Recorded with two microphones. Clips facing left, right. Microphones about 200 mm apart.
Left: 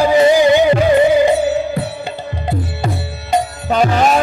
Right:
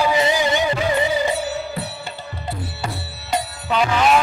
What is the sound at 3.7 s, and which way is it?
Music, 45° left (ahead or behind).